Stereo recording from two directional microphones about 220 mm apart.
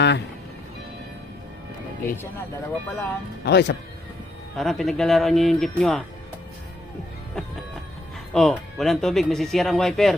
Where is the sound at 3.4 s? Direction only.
50° left (ahead or behind).